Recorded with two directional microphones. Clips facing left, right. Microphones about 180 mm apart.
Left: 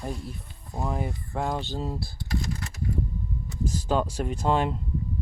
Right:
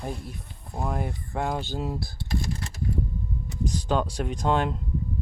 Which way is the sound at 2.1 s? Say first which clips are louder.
Right 1 dB; 30° right (ahead or behind).